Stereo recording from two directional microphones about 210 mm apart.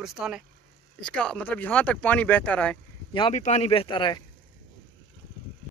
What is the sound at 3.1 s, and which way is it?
Speech, 25° left (ahead or behind).